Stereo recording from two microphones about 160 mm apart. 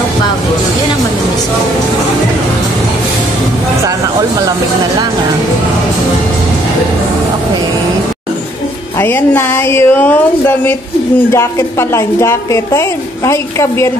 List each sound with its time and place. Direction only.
9.0 s speech: 15° left (ahead or behind)
11.9 s speech: 15° left (ahead or behind)